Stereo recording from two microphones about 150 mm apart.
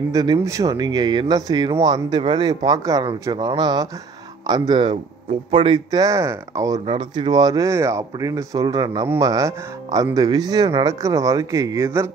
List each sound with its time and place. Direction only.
0.1 s speech: 25° right (ahead or behind)
6.9 s speech: 30° right (ahead or behind)